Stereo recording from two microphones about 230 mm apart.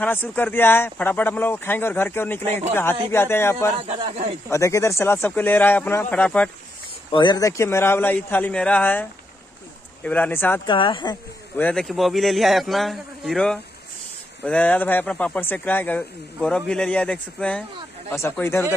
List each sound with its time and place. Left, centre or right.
0.0 s speech: centre
3.8 s speech: right
4.5 s speech: centre
7.1 s speech: centre
10.0 s speech: centre
10.7 s speech: left
11.5 s speech: centre